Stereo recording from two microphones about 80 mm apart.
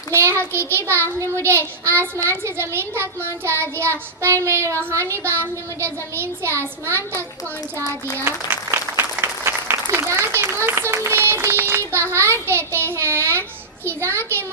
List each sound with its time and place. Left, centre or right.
0.1 s a sound: right
0.7 s child singing: right
2.4 s speech: right
3.2 s child singing: right
9.2 s applause: right
10.3 s a child's voice: right
12.5 s child singing: right
13.8 s speech: right